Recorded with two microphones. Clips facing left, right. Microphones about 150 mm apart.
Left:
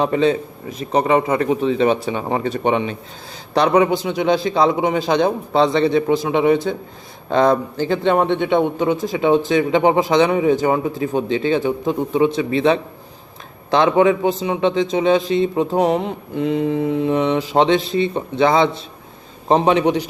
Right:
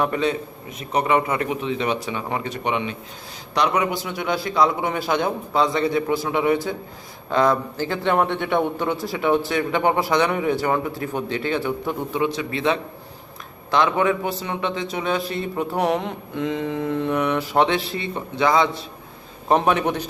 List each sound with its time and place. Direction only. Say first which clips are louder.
0.0 s a man's voice: left 5 dB; 25° left (ahead or behind)
15.5 s mantra: left 5 dB; 15° left (ahead or behind)
17.5 s speech: left 5 dB; 20° left (ahead or behind)